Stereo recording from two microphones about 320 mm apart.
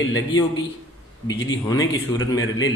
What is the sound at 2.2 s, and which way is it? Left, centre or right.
Speech, left.